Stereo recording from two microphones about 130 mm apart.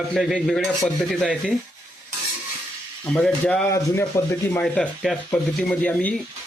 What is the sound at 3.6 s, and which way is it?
Speech, 20° left (ahead or behind).